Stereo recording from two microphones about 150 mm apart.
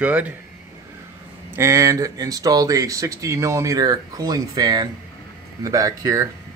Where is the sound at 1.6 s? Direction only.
20° right (ahead or behind).